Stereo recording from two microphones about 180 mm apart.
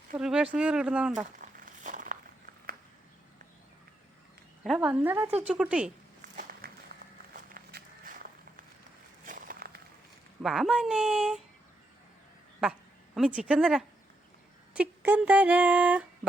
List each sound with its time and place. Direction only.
0.2 s speech: 5° right (ahead or behind)
1.2 s a sound: 45° right (ahead or behind)
4.6 s speech: 5° right (ahead or behind)
6.3 s walk: 55° right (ahead or behind)
9.2 s a sound: 50° right (ahead or behind)
10.4 s speech: centre (ahead or behind)
13.1 s speech: 5° right (ahead or behind)